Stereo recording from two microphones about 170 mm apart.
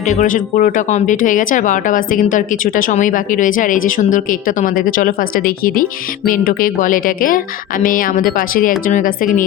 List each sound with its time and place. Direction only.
0.1 s speech: 45° left (ahead or behind)